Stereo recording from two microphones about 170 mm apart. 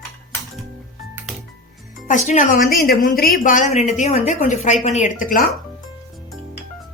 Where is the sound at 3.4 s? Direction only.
50° left (ahead or behind).